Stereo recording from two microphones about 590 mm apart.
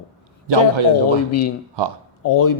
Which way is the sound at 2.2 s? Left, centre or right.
Left.